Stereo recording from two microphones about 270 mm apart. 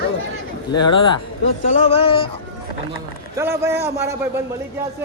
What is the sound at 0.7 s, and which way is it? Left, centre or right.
Speech, left.